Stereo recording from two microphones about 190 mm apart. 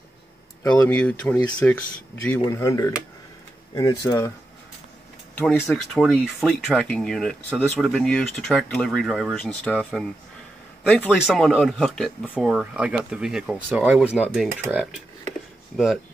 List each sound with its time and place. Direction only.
0.8 s speech: 5° left (ahead or behind)
5.4 s speech: 5° left (ahead or behind)
11.1 s speech: centre (ahead or behind)